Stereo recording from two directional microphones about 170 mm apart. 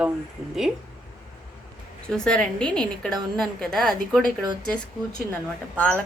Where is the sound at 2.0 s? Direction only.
5° left (ahead or behind).